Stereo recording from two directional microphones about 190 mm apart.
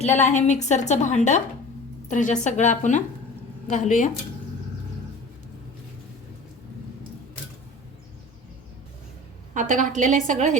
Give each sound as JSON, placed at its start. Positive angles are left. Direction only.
{"t": 0.0, "sound": "a woman's voice", "side_deg": 35}
{"t": 9.6, "sound": "a woman's voice", "side_deg": -40}